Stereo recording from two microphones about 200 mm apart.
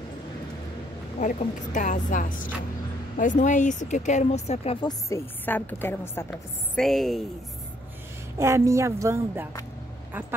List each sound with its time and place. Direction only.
1.2 s speech: 40° left (ahead or behind)
4.8 s a woman's voice: 10° left (ahead or behind)
8.4 s a woman's voice: 15° right (ahead or behind)